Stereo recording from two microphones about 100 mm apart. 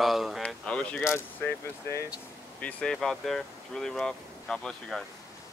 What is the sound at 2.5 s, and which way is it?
Speech, 15° left (ahead or behind).